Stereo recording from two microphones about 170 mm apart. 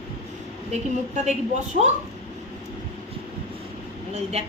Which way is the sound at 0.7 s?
40° right (ahead or behind).